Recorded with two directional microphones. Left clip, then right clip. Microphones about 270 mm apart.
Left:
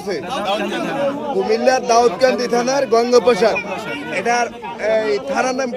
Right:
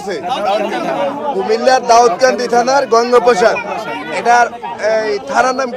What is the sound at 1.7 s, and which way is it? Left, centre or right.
Speech, right.